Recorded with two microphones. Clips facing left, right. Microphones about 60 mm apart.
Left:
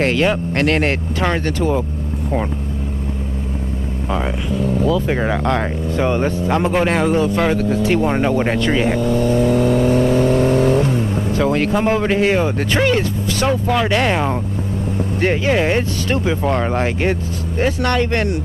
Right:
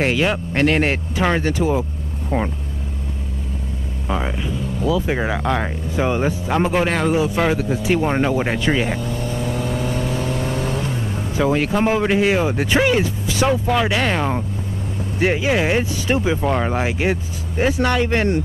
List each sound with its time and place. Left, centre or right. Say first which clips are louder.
0.0 s speech: left 3 dB; centre
4.8 s speech: right 1 dB; centre
9.0 s vehicle: left 9 dB; left
11.3 s speech: even; centre
15.1 s speech: left 1 dB; centre